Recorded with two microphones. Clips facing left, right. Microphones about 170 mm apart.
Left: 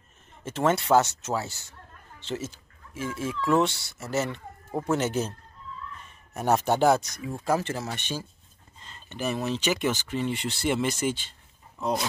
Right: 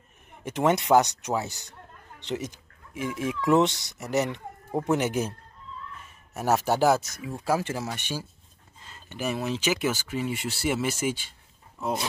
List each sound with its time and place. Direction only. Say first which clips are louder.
0.4 s speech: right 1 dB; 15° right (ahead or behind)
6.3 s speech: even; 5° right (ahead or behind)